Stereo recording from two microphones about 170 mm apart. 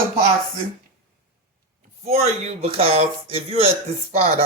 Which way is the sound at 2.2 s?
35° right (ahead or behind).